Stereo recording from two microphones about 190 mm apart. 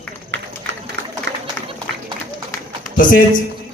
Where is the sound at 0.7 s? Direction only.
70° right (ahead or behind).